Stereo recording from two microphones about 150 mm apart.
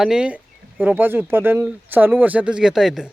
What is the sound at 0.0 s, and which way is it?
Speech, 5° right (ahead or behind).